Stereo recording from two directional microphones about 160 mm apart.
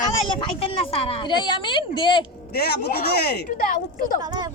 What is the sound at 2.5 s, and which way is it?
Speech, 75° left (ahead or behind).